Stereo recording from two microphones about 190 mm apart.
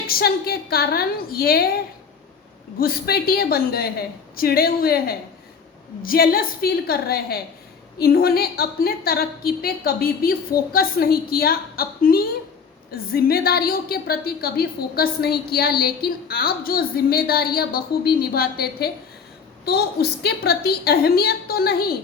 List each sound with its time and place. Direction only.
0.1 s a woman's voice: 55° left (ahead or behind)
2.7 s a woman's voice: 50° left (ahead or behind)